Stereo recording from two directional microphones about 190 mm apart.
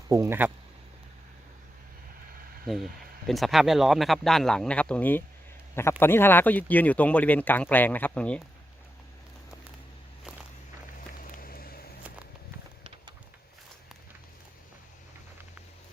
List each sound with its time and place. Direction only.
0.1 s speech: 15° right (ahead or behind)
2.7 s speech: centre (ahead or behind)
11.2 s vehicle: 50° left (ahead or behind)